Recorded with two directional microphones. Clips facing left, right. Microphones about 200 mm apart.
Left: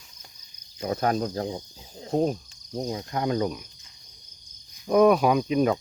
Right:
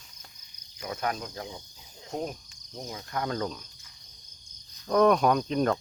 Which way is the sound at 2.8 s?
20° left (ahead or behind).